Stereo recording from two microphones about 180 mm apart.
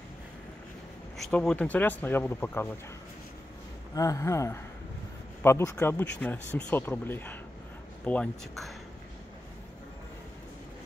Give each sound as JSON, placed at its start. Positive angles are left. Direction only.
{"t": 1.1, "sound": "speech", "side_deg": 5}
{"t": 3.9, "sound": "speech", "side_deg": 20}